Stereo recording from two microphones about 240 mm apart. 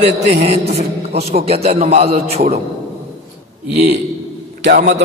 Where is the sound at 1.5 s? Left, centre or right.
Right.